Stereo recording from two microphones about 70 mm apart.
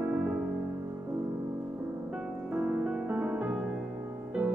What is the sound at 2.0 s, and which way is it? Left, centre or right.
Music, centre.